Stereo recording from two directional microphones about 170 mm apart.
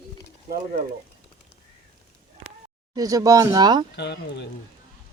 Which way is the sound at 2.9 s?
20° right (ahead or behind).